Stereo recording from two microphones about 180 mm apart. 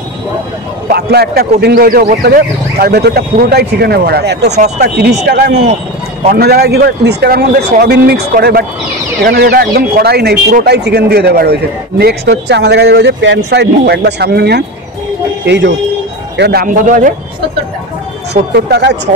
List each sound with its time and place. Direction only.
0.8 s speech: 65° right (ahead or behind); by 17.1 s 45° right (ahead or behind)
18.3 s speech: 65° right (ahead or behind)